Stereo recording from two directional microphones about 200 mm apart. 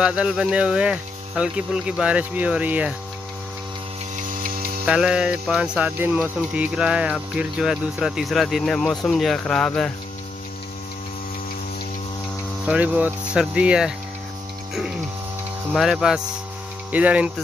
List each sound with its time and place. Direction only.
0.0 s speech: 5° right (ahead or behind)
4.4 s mains hum: 45° right (ahead or behind)
4.8 s speech: 5° right (ahead or behind)
12.6 s speech: 5° right (ahead or behind)
15.7 s speech: centre (ahead or behind)
16.9 s hum: 5° right (ahead or behind)